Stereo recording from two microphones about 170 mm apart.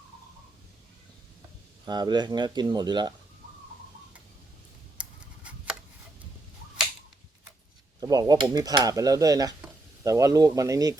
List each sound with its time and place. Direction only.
1.9 s cutlery: 25° right (ahead or behind)
4.9 s tick-tock: 5° right (ahead or behind)
8.0 s cutlery: 20° right (ahead or behind)